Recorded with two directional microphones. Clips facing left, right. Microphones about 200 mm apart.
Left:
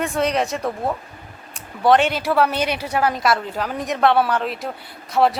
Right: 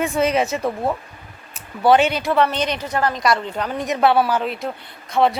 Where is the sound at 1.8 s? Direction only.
Centre (ahead or behind).